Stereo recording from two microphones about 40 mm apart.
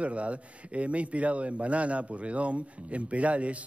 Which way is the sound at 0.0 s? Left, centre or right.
Right.